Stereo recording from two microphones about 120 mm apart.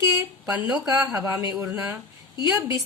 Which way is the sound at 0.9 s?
25° right (ahead or behind).